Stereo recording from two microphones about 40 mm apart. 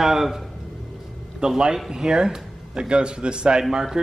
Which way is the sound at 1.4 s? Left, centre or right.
Centre.